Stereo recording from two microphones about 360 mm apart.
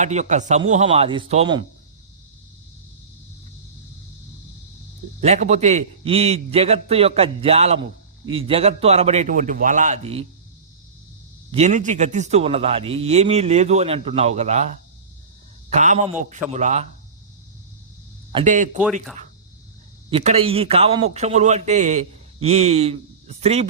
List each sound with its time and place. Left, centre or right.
0.0 s a man's voice: centre
5.2 s a man's voice: centre
11.5 s a man's voice: centre
18.3 s a man's voice: centre
20.1 s a man's voice: centre